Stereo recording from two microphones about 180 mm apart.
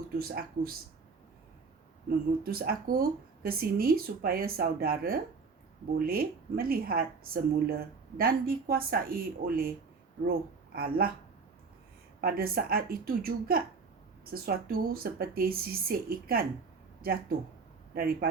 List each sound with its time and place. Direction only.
0.2 s speech: 55° right (ahead or behind)
2.4 s speech: 55° right (ahead or behind)
10.8 s speech: 55° right (ahead or behind)
12.2 s speech: 55° right (ahead or behind)